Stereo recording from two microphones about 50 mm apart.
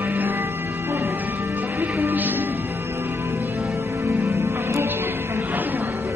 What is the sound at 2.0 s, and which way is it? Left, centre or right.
Music, right.